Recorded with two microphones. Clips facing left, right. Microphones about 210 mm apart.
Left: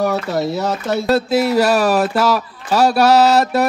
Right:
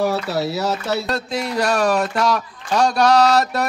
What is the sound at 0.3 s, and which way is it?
Speech, 5° right (ahead or behind).